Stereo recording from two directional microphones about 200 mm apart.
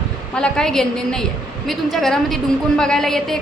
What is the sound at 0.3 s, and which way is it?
A woman's voice, 5° left (ahead or behind).